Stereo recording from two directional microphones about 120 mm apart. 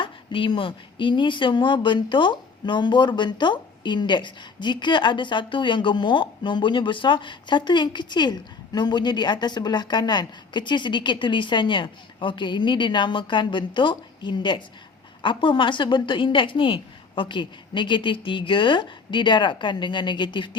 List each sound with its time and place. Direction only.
0.0 s a woman's voice: 45° left (ahead or behind)